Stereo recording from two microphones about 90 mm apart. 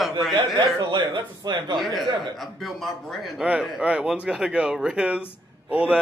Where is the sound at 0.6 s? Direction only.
55° right (ahead or behind).